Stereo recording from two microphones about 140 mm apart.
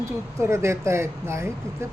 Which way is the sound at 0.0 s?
20° right (ahead or behind).